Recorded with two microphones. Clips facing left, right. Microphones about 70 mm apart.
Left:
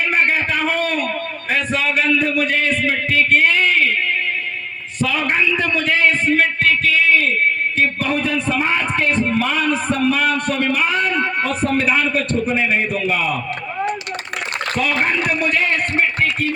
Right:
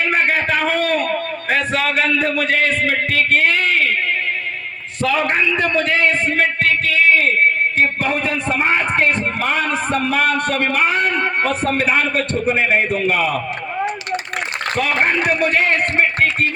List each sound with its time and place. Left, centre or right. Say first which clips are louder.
0.3 s a sound: right 1 dB; right
2.3 s music: even; right
2.6 s music: right 1 dB; right
5.0 s a man's voice: right 2 dB; right
8.1 s a man's voice: left 1 dB; right
8.4 s music: right 1 dB; right
13.0 s a man's voice: right 2 dB; right
14.8 s music: right 2 dB; right